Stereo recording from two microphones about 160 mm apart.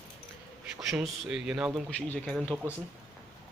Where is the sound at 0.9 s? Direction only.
Centre (ahead or behind).